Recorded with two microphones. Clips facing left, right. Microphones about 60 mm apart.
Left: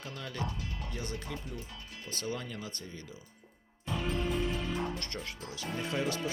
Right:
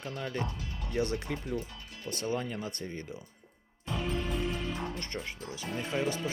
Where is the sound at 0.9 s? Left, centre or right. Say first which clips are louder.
Right 10 dB; right.